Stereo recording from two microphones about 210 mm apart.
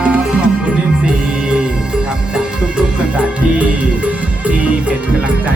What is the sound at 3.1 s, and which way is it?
Music, 5° right (ahead or behind).